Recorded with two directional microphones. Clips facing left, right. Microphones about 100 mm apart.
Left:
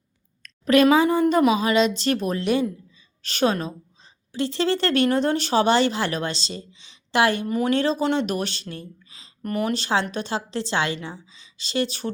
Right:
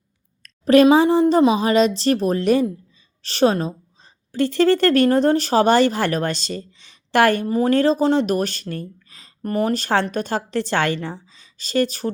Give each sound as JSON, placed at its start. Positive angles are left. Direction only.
{"t": 0.4, "sound": "a woman's voice", "side_deg": -35}
{"t": 4.3, "sound": "speech", "side_deg": -50}
{"t": 7.4, "sound": "a woman's voice", "side_deg": -35}